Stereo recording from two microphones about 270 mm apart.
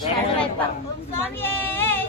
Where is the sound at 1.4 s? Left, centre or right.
Centre.